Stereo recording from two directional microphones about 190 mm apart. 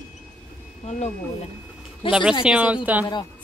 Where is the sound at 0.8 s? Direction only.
35° left (ahead or behind).